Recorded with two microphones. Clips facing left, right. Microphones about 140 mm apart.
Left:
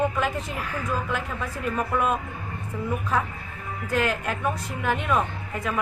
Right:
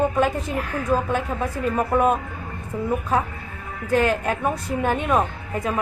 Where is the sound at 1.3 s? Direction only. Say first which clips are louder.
Right 5 dB; 35° right (ahead or behind).